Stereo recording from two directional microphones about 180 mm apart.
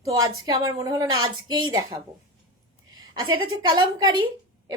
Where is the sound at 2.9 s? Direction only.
20° right (ahead or behind).